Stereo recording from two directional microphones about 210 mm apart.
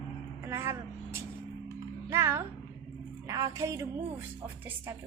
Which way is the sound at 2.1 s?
10° right (ahead or behind).